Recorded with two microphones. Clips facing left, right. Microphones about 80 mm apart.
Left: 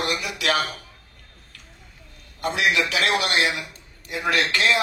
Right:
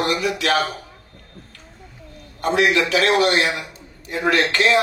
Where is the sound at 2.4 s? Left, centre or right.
Right.